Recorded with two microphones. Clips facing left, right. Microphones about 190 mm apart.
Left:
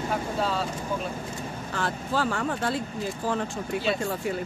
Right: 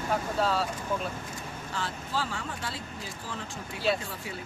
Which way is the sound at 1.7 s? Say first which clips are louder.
Left 6 dB; 55° left (ahead or behind).